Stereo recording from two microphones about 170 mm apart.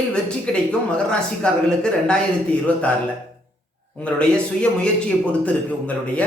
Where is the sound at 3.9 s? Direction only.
5° left (ahead or behind).